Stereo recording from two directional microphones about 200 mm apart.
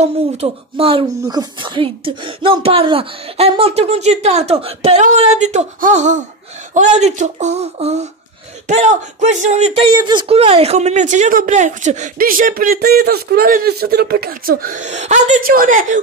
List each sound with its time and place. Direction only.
0.0 s speech: 30° right (ahead or behind)
1.0 s speech: 15° right (ahead or behind); by 9.8 s 35° right (ahead or behind)
9.8 s speech: 20° right (ahead or behind); by 16.0 s 40° right (ahead or behind)